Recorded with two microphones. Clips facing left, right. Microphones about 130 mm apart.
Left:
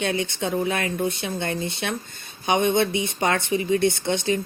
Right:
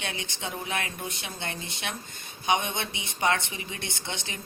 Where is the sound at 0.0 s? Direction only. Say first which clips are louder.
Left 11 dB; 40° left (ahead or behind).